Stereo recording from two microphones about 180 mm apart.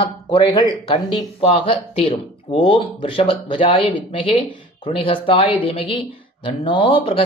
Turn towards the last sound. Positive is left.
turn(degrees=30)  # may be behind; listen again after turning